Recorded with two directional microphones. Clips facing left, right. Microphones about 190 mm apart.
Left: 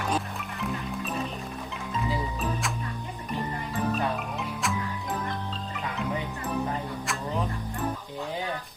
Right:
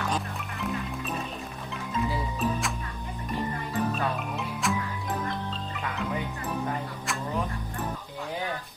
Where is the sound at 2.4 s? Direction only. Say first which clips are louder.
Right 2 dB; centre (ahead or behind).